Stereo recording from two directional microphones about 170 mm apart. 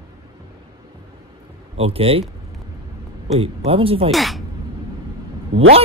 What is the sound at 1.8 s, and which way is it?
Speech, 35° right (ahead or behind).